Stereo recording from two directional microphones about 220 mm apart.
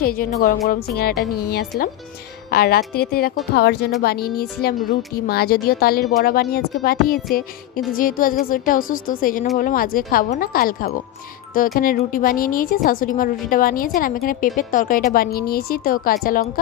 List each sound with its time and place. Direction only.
0.0 s a woman's voice: 40° left (ahead or behind)
2.5 s a woman's voice: 45° left (ahead or behind)